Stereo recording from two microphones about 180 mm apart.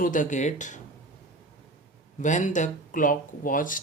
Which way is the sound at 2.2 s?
40° left (ahead or behind).